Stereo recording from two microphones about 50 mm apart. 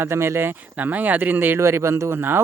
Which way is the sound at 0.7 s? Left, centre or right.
Right.